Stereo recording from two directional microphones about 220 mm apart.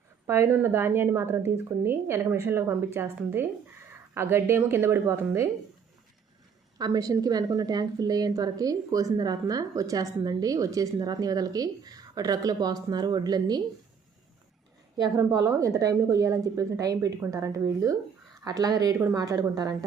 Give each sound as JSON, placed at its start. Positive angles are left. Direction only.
{"t": 0.3, "sound": "a woman's voice", "side_deg": -10}
{"t": 6.7, "sound": "a woman's voice", "side_deg": -15}
{"t": 14.9, "sound": "a woman's voice", "side_deg": -15}